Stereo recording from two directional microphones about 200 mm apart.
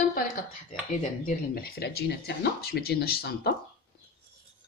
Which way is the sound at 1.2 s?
50° left (ahead or behind).